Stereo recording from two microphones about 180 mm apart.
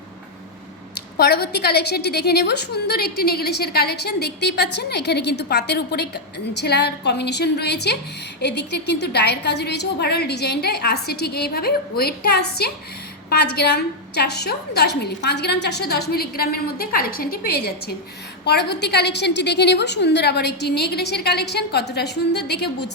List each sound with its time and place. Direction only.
1.1 s a woman's voice: 60° left (ahead or behind)